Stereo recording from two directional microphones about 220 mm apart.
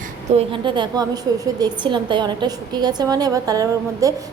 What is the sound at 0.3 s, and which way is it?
A woman's voice, 20° right (ahead or behind).